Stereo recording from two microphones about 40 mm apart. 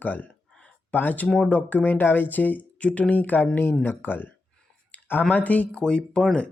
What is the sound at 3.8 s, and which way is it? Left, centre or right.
Speech, left.